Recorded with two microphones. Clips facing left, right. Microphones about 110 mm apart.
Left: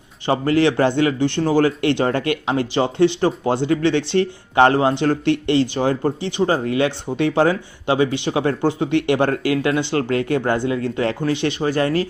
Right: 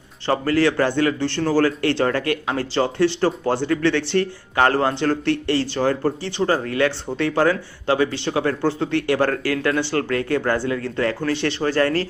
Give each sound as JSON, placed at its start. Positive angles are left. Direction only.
{"t": 0.3, "sound": "a man's voice", "side_deg": 20}